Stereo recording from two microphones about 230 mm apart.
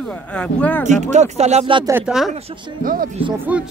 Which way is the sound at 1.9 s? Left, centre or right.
Centre.